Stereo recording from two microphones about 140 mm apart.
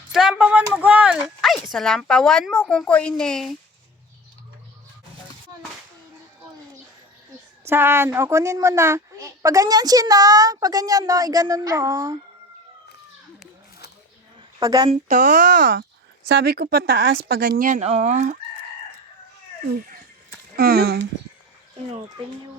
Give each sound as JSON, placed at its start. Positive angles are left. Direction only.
{"t": 0.1, "sound": "a sound", "side_deg": -5}
{"t": 7.7, "sound": "a woman's voice", "side_deg": -15}
{"t": 14.6, "sound": "speech", "side_deg": -25}
{"t": 15.1, "sound": "speech", "side_deg": -65}
{"t": 17.7, "sound": "speech", "side_deg": -50}
{"t": 20.6, "sound": "speech", "side_deg": -90}